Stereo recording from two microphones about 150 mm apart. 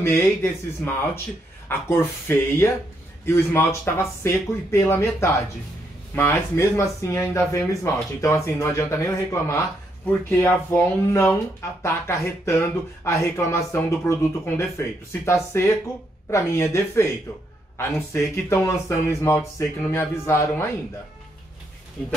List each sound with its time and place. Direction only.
0.0 s speech: 15° left (ahead or behind)